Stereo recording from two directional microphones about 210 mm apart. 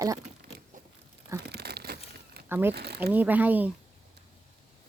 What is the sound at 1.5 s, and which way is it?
Crumpling, 50° right (ahead or behind).